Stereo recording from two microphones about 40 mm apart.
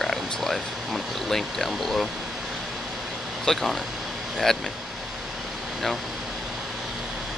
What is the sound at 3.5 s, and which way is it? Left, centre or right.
Speech, centre.